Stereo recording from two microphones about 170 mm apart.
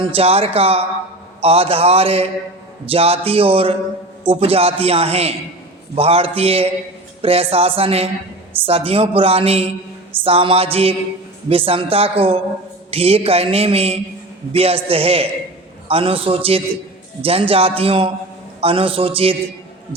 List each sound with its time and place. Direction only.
0.0 s a man's voice: 35° right (ahead or behind)